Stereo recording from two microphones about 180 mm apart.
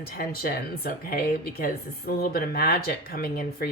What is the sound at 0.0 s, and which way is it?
A woman's voice, 60° left (ahead or behind).